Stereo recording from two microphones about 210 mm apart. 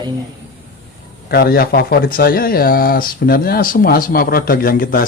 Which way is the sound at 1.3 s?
50° left (ahead or behind).